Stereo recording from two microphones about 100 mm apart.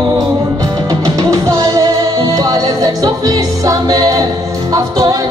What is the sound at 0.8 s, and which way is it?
Music, 40° right (ahead or behind).